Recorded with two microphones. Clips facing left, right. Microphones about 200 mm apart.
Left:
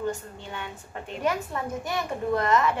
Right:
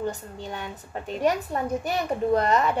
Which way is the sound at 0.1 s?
40° right (ahead or behind).